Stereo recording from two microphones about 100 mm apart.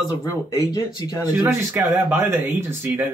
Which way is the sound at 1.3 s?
25° right (ahead or behind).